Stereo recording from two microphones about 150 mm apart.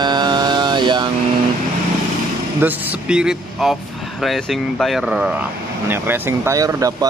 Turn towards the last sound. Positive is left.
turn(degrees=-25)  # may be behind; listen again after turning